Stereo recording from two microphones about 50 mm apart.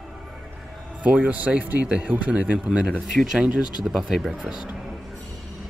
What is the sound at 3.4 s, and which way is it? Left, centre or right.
Speech, centre.